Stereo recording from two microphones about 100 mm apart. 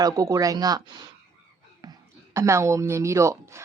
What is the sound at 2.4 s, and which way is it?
A woman's voice, 30° right (ahead or behind).